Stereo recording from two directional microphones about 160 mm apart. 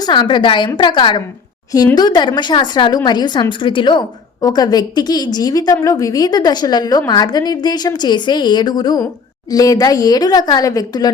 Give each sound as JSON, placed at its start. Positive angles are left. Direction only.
{"t": 0.0, "sound": "a woman's voice", "side_deg": 30}